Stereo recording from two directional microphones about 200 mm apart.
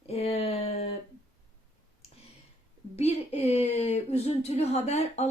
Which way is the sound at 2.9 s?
30° left (ahead or behind).